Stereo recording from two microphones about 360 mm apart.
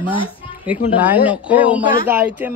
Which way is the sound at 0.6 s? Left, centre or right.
Centre.